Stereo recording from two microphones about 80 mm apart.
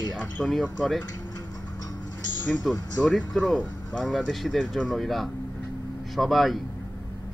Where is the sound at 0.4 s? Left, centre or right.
Centre.